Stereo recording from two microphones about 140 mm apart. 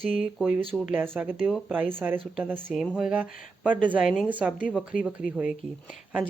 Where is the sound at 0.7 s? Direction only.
Centre (ahead or behind).